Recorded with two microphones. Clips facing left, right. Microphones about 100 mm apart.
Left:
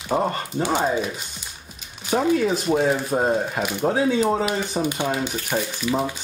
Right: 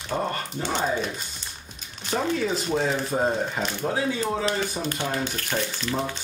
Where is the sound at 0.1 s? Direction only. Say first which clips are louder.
Left 5 dB; 20° left (ahead or behind).